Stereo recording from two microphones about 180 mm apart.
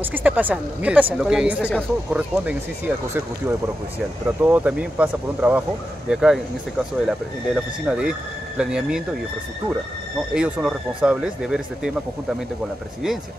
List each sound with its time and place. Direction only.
0.0 s speech: 10° right (ahead or behind)
4.4 s speech: 10° right (ahead or behind)
10.3 s speech: 5° right (ahead or behind)